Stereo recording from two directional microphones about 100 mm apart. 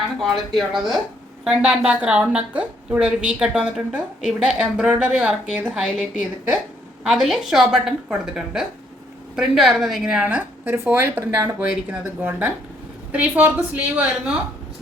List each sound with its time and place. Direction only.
0.3 s a woman's voice: centre (ahead or behind)
10.2 s a woman's voice: 20° right (ahead or behind)